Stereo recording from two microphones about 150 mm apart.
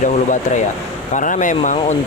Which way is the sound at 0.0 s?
55° left (ahead or behind).